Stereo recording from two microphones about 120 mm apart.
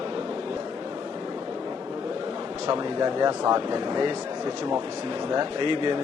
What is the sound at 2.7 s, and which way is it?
A man's voice, 35° right (ahead or behind).